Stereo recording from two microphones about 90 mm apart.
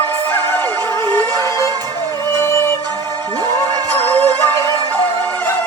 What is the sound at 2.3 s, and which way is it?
Music, 25° left (ahead or behind).